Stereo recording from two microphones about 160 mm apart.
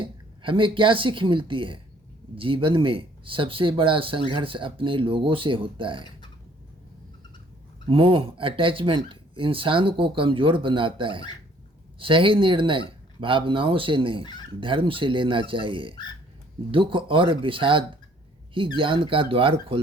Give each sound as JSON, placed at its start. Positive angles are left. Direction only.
{"t": 0.0, "sound": "speech", "side_deg": -30}
{"t": 7.9, "sound": "speech", "side_deg": -35}